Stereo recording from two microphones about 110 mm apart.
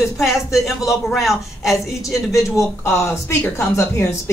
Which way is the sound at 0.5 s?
Centre (ahead or behind).